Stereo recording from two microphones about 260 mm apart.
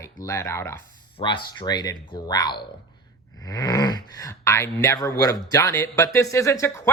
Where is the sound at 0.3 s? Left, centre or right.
Centre.